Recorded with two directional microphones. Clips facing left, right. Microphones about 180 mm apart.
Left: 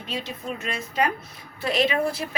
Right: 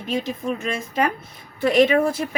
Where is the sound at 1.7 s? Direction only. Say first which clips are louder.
Right 7 dB; 50° right (ahead or behind).